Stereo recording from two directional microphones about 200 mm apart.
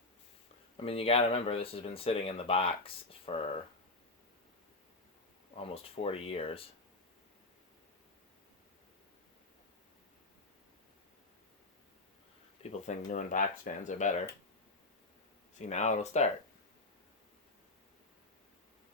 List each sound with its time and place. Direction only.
0.8 s speech: 30° left (ahead or behind)
5.7 s speech: 30° left (ahead or behind)
12.7 s speech: 35° left (ahead or behind)
15.5 s speech: 35° left (ahead or behind)